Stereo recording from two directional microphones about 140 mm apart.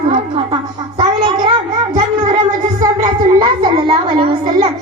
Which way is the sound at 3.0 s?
35° right (ahead or behind).